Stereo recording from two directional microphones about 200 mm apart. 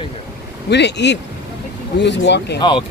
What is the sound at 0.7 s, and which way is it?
Speech, 60° left (ahead or behind).